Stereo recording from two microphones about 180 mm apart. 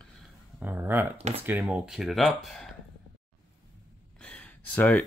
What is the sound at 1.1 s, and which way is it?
Speech, 35° right (ahead or behind).